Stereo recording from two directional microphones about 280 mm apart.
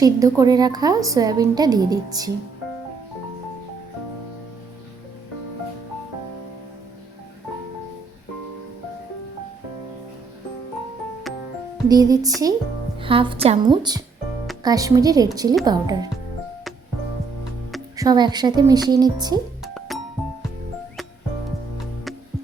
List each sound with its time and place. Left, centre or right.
0.0 s a woman's voice: centre
11.9 s a woman's voice: centre
17.9 s a woman's voice: centre
19.6 s music: centre